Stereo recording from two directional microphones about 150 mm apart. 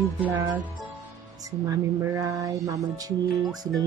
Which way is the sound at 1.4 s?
20° right (ahead or behind).